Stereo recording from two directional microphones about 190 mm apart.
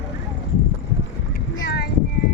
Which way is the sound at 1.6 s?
60° left (ahead or behind).